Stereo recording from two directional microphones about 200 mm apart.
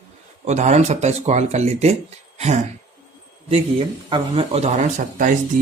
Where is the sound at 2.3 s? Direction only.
35° right (ahead or behind).